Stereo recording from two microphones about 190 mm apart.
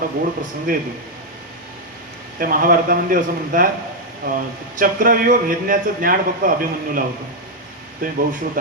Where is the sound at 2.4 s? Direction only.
50° right (ahead or behind).